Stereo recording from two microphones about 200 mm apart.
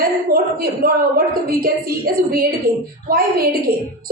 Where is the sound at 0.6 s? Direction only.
50° right (ahead or behind).